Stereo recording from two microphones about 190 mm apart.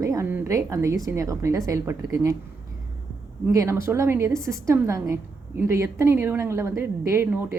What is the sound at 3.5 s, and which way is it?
Speech, 15° right (ahead or behind).